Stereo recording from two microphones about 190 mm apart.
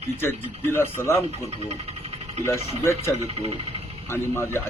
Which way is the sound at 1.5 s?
35° right (ahead or behind).